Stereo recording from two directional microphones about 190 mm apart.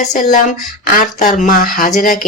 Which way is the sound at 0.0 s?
40° left (ahead or behind).